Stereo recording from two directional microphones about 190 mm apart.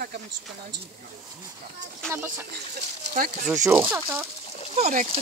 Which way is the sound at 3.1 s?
40° right (ahead or behind).